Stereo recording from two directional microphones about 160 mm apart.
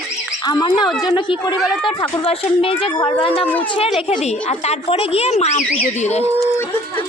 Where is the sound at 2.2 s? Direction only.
35° left (ahead or behind).